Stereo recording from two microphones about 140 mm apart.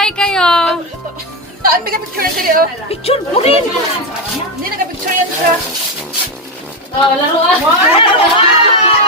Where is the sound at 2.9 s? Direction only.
45° left (ahead or behind).